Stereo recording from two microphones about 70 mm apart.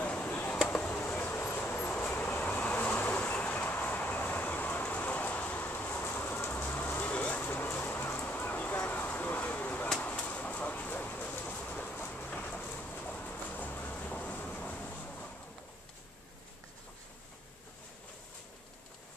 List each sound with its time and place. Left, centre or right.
0.0 s chop: centre
0.7 s vehicle: left
10.0 s a sound: centre
11.6 s vehicle: left
12.9 s train: left
13.9 s vehicle: centre